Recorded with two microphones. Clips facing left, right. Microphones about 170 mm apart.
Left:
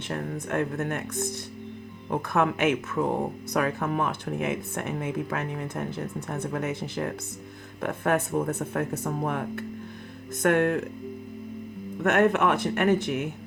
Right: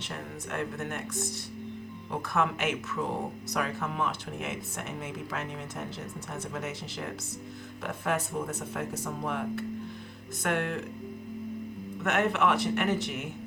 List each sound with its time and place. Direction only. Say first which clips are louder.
0.1 s speech: left 8 dB; 55° left (ahead or behind)
12.0 s speech: left 5 dB; 50° left (ahead or behind)